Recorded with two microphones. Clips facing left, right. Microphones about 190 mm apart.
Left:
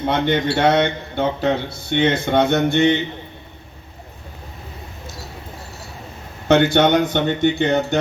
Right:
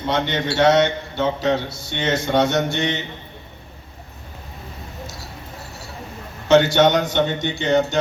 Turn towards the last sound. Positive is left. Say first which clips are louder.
# left 1 dB
turn(degrees=55)  # may be behind; listen again after turning